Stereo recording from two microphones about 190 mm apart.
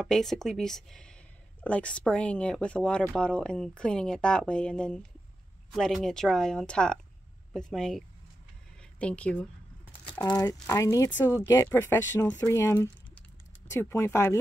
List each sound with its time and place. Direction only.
0.0 s speech: centre (ahead or behind)
9.0 s speech: 5° left (ahead or behind)
10.2 s speech: 15° left (ahead or behind)